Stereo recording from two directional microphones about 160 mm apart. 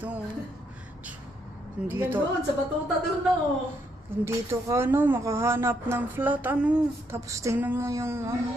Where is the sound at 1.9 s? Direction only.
15° right (ahead or behind).